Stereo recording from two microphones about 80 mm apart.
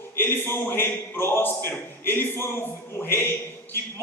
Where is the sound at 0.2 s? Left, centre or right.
Left.